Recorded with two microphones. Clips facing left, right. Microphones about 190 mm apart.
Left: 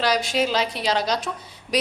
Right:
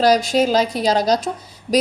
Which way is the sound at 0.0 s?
45° right (ahead or behind).